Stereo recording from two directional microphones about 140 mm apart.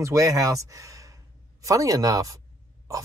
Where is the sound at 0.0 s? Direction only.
25° right (ahead or behind).